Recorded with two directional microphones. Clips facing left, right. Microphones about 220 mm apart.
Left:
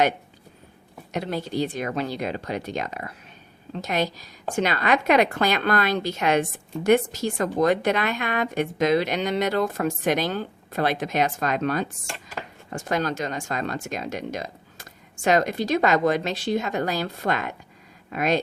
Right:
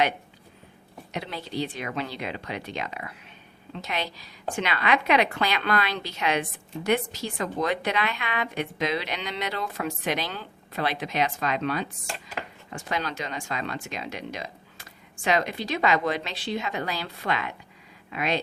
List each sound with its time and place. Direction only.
1.1 s a woman's voice: 45° left (ahead or behind)